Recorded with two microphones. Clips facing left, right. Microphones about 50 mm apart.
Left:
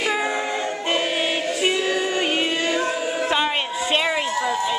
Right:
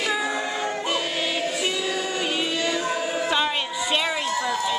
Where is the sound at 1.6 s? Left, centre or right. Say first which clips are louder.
Left 5 dB; left.